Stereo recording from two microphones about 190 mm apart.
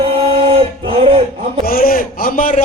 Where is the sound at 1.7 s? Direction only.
50° left (ahead or behind).